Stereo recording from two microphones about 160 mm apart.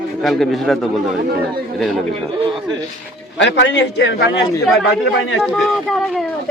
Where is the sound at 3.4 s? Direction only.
90° left.